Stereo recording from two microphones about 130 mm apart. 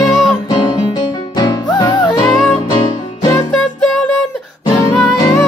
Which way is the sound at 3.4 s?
5° left (ahead or behind).